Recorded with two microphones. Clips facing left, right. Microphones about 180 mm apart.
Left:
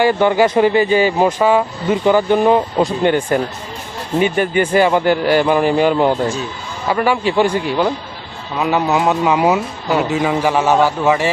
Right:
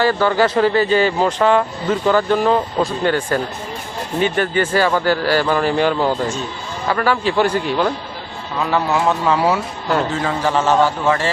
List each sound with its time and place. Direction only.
0.0 s speech: 15° left (ahead or behind)